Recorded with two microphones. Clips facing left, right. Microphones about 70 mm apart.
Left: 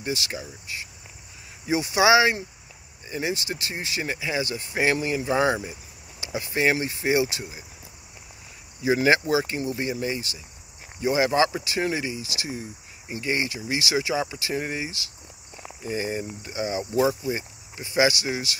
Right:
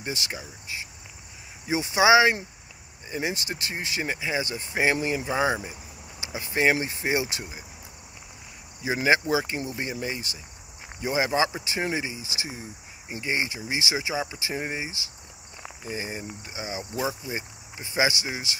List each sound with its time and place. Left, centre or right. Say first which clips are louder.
0.3 s speech: left 2 dB; centre
1.7 s speech: even; right
5.2 s speech: left 5 dB; centre
6.3 s speech: even; right
8.8 s speech: left 3 dB; centre
11.0 s speech: left 3 dB; centre
11.6 s speech: left 2 dB; right
17.0 s speech: left 7 dB; centre
17.4 s speech: left 1 dB; right